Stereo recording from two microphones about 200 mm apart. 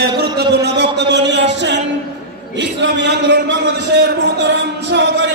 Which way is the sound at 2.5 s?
60° right (ahead or behind).